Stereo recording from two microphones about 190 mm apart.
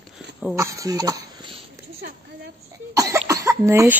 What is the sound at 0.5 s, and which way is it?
Speech, 15° right (ahead or behind).